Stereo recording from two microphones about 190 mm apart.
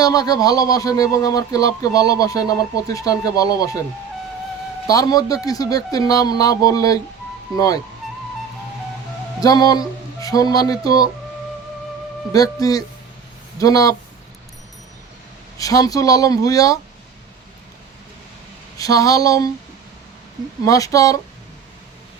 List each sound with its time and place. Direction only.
0.0 s speech: 20° left (ahead or behind)
4.9 s speech: 20° left (ahead or behind)
9.4 s speech: 20° left (ahead or behind)
12.3 s speech: 20° left (ahead or behind)
15.5 s speech: 20° left (ahead or behind)
18.8 s speech: 20° left (ahead or behind)
20.7 s speech: 20° left (ahead or behind)